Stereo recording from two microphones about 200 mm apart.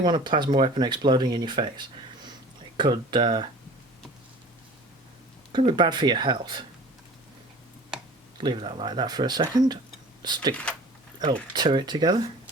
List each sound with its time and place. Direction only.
0.0 s speech: 20° right (ahead or behind)
5.5 s speech: 25° right (ahead or behind)
8.4 s speech: 25° right (ahead or behind)